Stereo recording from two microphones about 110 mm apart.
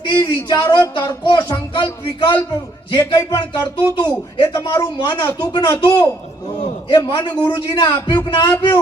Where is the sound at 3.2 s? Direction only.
35° left (ahead or behind).